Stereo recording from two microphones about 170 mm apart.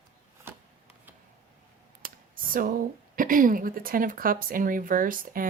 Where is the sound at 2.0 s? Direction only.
55° right (ahead or behind).